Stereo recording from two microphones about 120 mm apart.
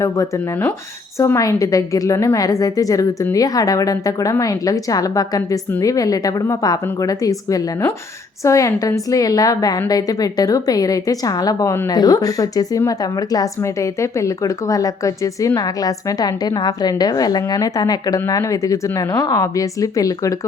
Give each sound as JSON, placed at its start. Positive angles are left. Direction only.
{"t": 0.0, "sound": "a woman's voice", "side_deg": 25}